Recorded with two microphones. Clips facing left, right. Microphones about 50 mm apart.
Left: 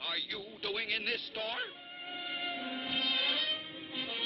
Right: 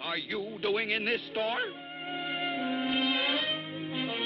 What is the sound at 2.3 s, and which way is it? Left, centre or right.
Music, centre.